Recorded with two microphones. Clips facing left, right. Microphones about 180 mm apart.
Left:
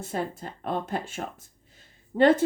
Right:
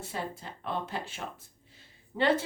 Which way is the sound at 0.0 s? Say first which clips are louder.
Left 6 dB; 45° left (ahead or behind).